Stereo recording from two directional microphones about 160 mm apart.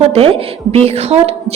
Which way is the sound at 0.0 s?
40° right (ahead or behind).